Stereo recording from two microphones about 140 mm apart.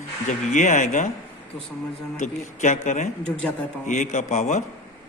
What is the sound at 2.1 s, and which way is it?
A man's voice, 60° left (ahead or behind).